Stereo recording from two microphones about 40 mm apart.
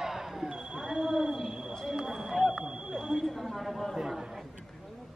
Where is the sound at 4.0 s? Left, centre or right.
Centre.